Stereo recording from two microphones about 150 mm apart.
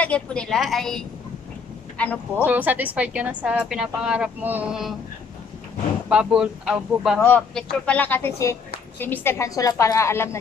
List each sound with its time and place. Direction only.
0.0 s speech: 5° left (ahead or behind)
2.4 s a woman's voice: 10° right (ahead or behind)
6.0 s speech: 5° right (ahead or behind)
7.2 s a woman's voice: 10° left (ahead or behind)